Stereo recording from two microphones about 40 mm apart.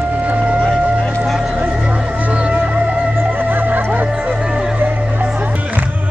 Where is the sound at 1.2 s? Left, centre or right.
Centre.